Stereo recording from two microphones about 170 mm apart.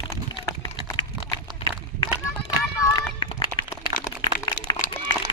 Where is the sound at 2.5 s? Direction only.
25° left (ahead or behind).